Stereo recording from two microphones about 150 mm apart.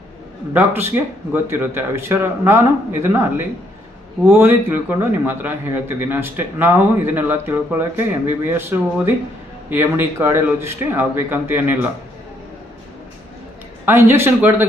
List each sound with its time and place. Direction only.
0.5 s speech: 15° right (ahead or behind)
13.8 s speech: 15° right (ahead or behind)